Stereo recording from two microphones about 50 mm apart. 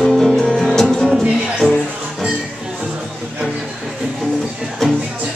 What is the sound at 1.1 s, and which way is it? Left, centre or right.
Music, centre.